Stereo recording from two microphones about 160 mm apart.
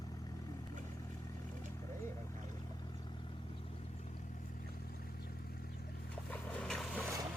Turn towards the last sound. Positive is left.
turn(degrees=0)  # may be behind; listen again after turning